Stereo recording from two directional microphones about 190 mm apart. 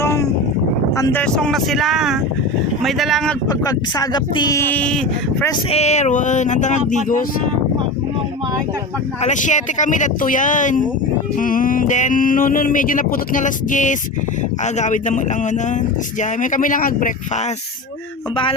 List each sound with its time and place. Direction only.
0.0 s a sound: 15° left (ahead or behind)
0.9 s speech: 15° left (ahead or behind)
1.2 s speech: 5° left (ahead or behind)
3.6 s speech: 20° left (ahead or behind)
4.7 s speech: 5° left (ahead or behind)
5.7 s speech: 35° left (ahead or behind)
9.2 s speech: 40° left (ahead or behind)
11.3 s a sound: 45° left (ahead or behind)
14.6 s speech: 40° left (ahead or behind)
16.4 s a sound: 45° left (ahead or behind)